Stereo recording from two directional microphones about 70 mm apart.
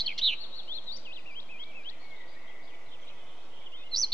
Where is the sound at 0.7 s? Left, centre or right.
Left.